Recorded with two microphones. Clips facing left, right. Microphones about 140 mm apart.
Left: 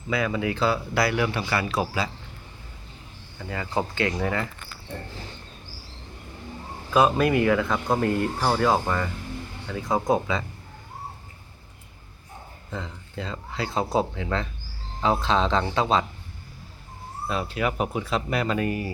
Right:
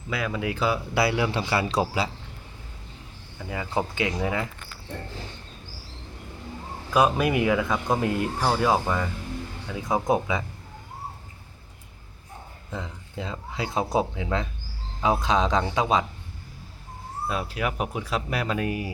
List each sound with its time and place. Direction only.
0.1 s speech: 5° right (ahead or behind)
0.9 s a man's voice: 25° right (ahead or behind)
3.3 s speech: 10° right (ahead or behind)
6.9 s speech: 10° right (ahead or behind)
12.7 s speech: 10° right (ahead or behind)
17.2 s speech: 5° right (ahead or behind)